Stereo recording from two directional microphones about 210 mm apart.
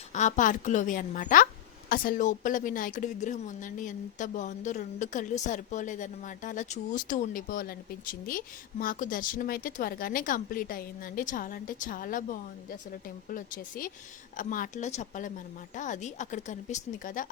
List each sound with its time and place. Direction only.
0.1 s a woman's voice: 35° left (ahead or behind)